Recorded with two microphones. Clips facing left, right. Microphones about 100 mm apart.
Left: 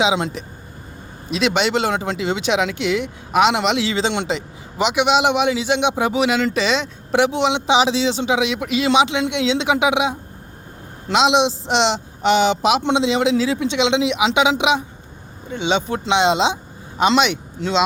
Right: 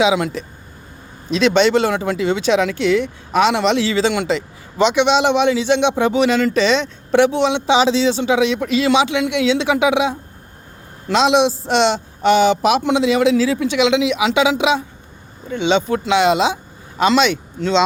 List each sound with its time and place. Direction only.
0.0 s a man's voice: 20° left (ahead or behind)